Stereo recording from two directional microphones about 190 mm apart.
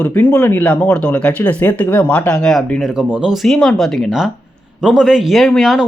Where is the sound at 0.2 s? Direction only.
10° left (ahead or behind).